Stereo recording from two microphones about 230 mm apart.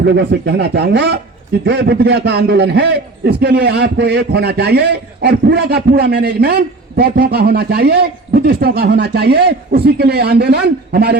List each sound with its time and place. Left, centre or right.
0.0 s a man's voice: right